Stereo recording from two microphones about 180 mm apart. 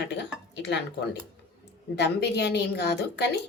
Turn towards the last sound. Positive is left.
turn(degrees=65)  # may be behind; listen again after turning